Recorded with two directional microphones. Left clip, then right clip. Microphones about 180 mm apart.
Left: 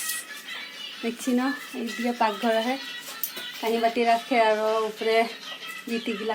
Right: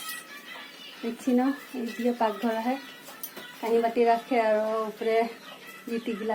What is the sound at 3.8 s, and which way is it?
Speech, 35° left (ahead or behind).